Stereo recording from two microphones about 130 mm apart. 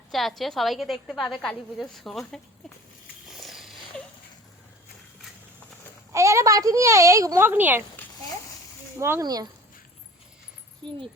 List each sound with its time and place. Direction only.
0.1 s a woman's voice: centre (ahead or behind)
3.2 s a sound: centre (ahead or behind)
6.1 s speech: 25° right (ahead or behind)
9.0 s speech: 20° right (ahead or behind)
9.2 s speech: 30° right (ahead or behind)
10.8 s speech: 40° right (ahead or behind)